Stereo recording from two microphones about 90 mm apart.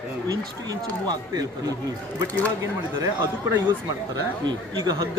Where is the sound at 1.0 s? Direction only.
45° right (ahead or behind).